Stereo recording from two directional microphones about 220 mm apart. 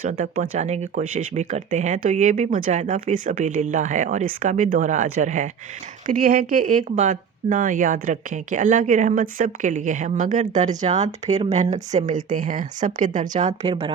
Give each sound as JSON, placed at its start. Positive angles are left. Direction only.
{"t": 0.0, "sound": "speech", "side_deg": -35}